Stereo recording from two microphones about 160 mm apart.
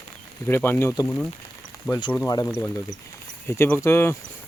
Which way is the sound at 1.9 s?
30° left (ahead or behind).